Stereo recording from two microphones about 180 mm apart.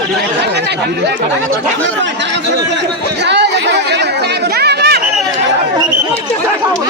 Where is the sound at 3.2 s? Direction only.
70° right (ahead or behind).